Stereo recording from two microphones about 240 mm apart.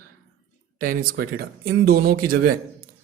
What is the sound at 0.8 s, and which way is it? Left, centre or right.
Speech, right.